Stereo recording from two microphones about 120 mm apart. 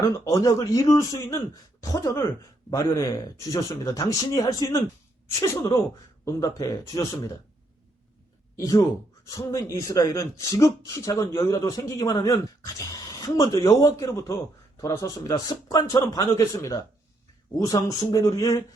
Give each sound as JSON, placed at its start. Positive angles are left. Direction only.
{"t": 0.3, "sound": "a man's voice", "side_deg": 30}
{"t": 6.2, "sound": "a man's voice", "side_deg": 25}
{"t": 8.5, "sound": "a man's voice", "side_deg": 25}